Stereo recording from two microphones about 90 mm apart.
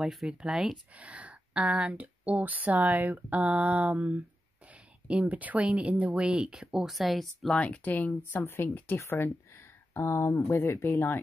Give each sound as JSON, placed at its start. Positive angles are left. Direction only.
{"t": 0.0, "sound": "speech", "side_deg": -5}
{"t": 7.5, "sound": "speech", "side_deg": 15}